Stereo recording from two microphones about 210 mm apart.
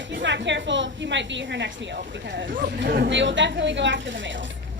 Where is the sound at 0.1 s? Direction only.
60° right (ahead or behind).